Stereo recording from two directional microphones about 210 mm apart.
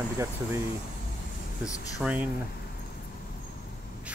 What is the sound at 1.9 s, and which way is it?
Speech, 5° right (ahead or behind).